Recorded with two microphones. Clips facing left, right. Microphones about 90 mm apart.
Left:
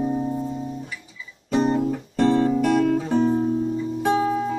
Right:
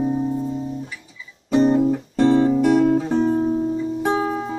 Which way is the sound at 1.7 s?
10° right (ahead or behind).